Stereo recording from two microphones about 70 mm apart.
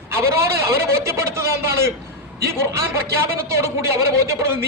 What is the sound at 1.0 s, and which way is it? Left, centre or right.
A man's voice, right.